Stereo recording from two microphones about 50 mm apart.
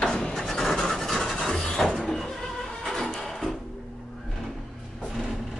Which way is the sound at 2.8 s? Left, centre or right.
Centre.